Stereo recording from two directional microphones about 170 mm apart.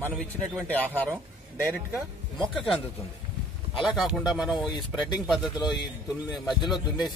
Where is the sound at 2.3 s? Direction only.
Centre (ahead or behind).